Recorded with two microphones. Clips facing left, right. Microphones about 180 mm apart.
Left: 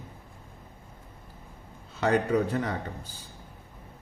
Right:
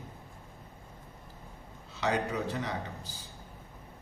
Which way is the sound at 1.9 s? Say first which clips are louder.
Left 7 dB; 55° left (ahead or behind).